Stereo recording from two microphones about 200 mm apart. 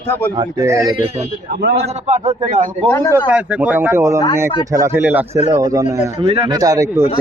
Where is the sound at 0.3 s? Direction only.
15° right (ahead or behind).